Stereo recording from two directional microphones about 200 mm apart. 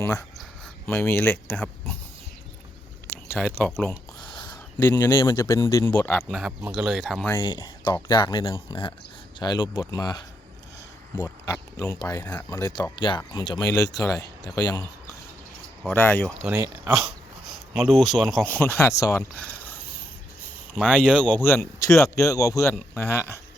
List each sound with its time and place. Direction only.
0.0 s speech: 15° left (ahead or behind)
3.3 s speech: 5° left (ahead or behind)
4.2 s a sound: 20° left (ahead or behind)
4.8 s speech: 15° left (ahead or behind)
6.7 s speech: 5° right (ahead or behind)
7.3 s speech: 20° left (ahead or behind)
16.4 s speech: 10° right (ahead or behind)
18.4 s speech: 10° left (ahead or behind)
21.1 s speech: 5° right (ahead or behind)
21.4 s speech: 10° left (ahead or behind)